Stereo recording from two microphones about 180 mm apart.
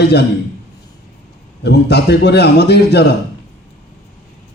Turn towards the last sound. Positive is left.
turn(degrees=70)  # may be behind; listen again after turning